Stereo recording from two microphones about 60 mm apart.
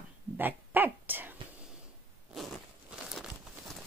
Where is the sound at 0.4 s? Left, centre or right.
Right.